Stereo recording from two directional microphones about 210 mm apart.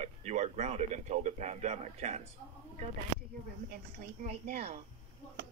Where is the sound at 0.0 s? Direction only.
35° right (ahead or behind).